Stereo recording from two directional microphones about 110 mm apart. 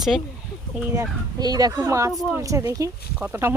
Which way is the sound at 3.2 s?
20° right (ahead or behind).